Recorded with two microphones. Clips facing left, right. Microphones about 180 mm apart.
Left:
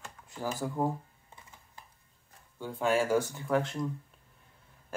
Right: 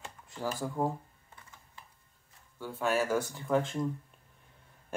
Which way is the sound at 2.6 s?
15° left (ahead or behind).